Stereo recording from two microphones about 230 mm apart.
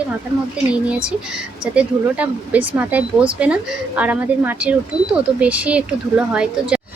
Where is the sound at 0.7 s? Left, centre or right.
Centre.